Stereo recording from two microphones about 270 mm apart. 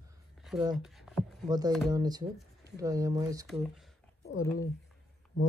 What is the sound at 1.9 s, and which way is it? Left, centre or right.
Speech, centre.